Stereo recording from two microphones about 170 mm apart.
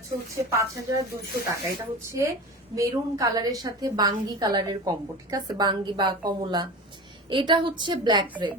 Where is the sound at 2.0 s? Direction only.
15° right (ahead or behind).